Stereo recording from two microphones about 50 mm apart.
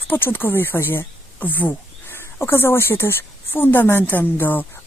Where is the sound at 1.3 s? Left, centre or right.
Left.